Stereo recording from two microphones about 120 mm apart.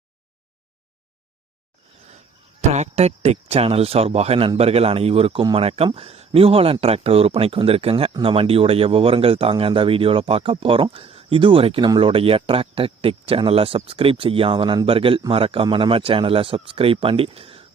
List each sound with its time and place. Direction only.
2.6 s speech: 70° right (ahead or behind); by 17.7 s 50° right (ahead or behind)